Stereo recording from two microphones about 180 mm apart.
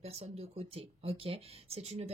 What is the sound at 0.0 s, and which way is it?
Speech, 35° right (ahead or behind).